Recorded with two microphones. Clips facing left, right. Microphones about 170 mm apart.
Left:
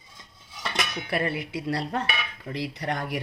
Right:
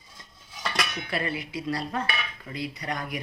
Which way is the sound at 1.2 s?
60° left (ahead or behind).